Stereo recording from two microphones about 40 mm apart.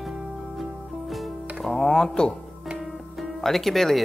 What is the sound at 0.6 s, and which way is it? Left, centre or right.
Music, centre.